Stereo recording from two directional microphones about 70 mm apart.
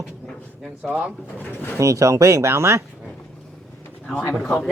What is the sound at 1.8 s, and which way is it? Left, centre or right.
Speech, right.